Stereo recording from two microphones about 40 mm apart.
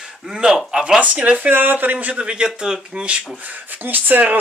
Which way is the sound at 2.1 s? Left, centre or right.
Right.